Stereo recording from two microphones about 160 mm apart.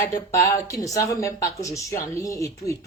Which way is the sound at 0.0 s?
20° left (ahead or behind).